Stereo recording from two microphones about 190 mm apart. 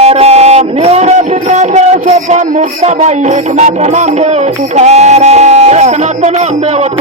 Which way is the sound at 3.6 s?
40° right (ahead or behind).